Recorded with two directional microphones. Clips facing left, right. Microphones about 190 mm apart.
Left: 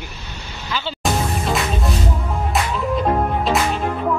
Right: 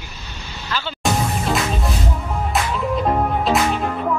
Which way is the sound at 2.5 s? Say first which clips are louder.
Even; centre (ahead or behind).